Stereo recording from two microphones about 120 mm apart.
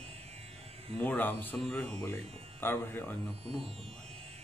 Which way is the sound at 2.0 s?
20° left (ahead or behind).